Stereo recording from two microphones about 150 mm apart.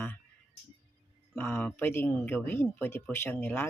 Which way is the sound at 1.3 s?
15° left (ahead or behind).